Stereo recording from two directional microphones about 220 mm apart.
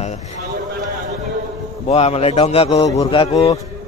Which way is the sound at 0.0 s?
30° left (ahead or behind).